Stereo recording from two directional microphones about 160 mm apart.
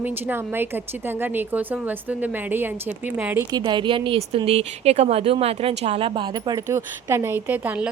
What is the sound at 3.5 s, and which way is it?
Speech, 30° right (ahead or behind).